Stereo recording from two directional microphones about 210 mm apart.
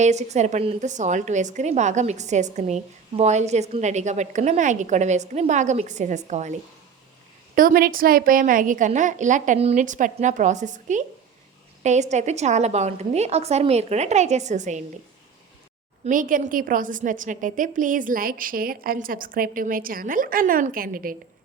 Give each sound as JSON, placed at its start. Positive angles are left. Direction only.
{"t": 0.0, "sound": "a woman's voice", "side_deg": -35}
{"t": 16.0, "sound": "a woman's voice", "side_deg": -40}